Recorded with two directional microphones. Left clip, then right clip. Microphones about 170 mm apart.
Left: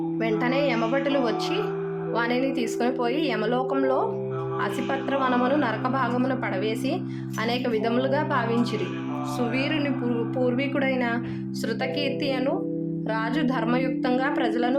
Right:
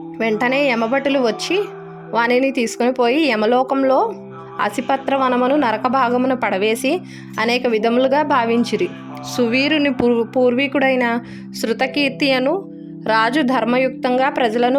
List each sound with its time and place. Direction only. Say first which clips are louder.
0.2 s a woman's voice: right 8 dB; 60° right (ahead or behind)
5.1 s speech: right 6 dB; 40° right (ahead or behind)
5.7 s a woman's voice: right 9 dB; 55° right (ahead or behind)
13.1 s a woman's voice: right 12 dB; 65° right (ahead or behind)